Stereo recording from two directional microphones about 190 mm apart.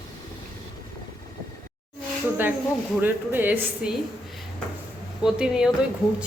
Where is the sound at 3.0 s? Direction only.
10° right (ahead or behind).